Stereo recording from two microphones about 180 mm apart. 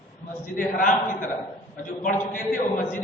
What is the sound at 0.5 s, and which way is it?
A man's voice, 50° left (ahead or behind).